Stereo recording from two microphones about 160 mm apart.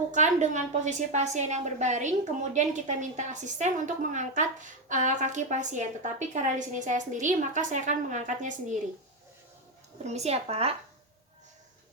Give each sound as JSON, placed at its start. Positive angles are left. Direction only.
{"t": 0.1, "sound": "a woman's voice", "side_deg": -50}
{"t": 10.0, "sound": "speech", "side_deg": -45}